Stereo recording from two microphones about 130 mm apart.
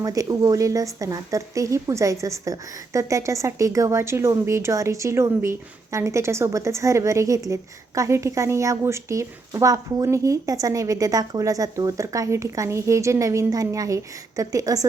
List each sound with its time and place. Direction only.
0.0 s speech: 25° right (ahead or behind)